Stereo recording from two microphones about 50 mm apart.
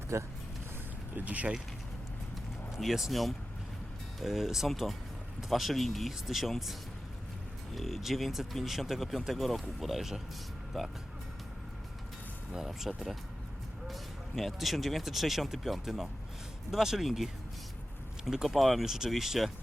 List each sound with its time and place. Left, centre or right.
0.1 s speech: right
1.1 s speech: right
2.7 s speech: centre
7.8 s speech: centre
12.5 s speech: centre
13.8 s speech: centre
18.3 s speech: centre